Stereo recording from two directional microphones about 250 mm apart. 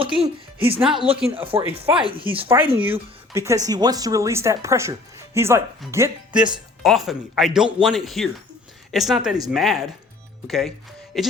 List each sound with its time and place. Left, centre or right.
0.2 s speech: right
2.8 s speech: centre